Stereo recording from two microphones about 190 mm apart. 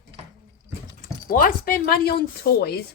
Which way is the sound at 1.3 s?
50° left (ahead or behind).